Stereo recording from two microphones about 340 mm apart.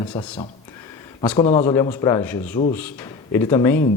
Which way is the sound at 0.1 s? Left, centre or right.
Centre.